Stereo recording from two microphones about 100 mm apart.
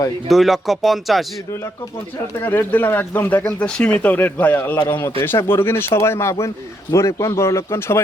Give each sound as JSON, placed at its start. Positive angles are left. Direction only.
{"t": 0.3, "sound": "speech", "side_deg": 0}
{"t": 2.4, "sound": "speech", "side_deg": 20}